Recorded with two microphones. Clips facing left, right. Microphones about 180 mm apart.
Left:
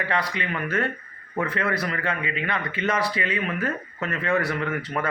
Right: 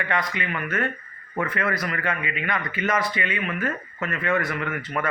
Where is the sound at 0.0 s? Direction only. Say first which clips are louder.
Even; 30° left (ahead or behind).